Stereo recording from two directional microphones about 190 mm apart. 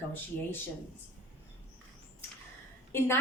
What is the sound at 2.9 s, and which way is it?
Speech, 10° left (ahead or behind).